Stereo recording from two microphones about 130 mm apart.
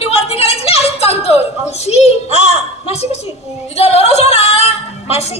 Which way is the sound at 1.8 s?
55° left (ahead or behind).